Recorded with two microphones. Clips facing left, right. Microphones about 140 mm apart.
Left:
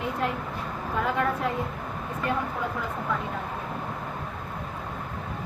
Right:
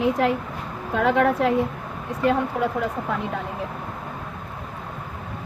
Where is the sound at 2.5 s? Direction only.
80° right.